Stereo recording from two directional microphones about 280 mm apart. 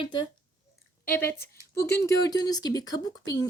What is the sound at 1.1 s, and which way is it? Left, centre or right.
Speech, centre.